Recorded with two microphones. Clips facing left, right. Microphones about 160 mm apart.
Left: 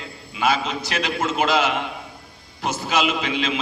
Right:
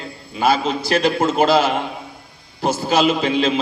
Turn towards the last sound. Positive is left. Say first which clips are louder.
# right 6 dB
turn(degrees=-35)  # may be behind; listen again after turning